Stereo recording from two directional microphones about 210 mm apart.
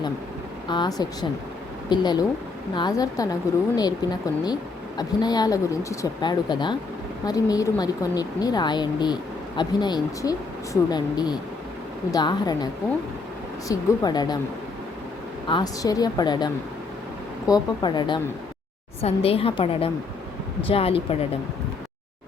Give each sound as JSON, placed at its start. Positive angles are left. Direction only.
{"t": 0.7, "sound": "speech", "side_deg": 20}
{"t": 13.7, "sound": "speech", "side_deg": 20}
{"t": 15.4, "sound": "speech", "side_deg": 20}